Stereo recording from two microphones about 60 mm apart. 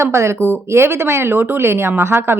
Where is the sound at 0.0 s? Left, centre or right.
Right.